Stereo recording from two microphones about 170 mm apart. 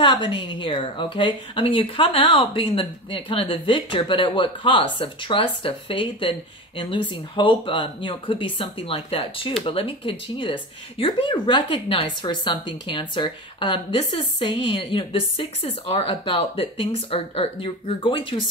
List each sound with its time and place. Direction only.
0.0 s speech: 30° left (ahead or behind)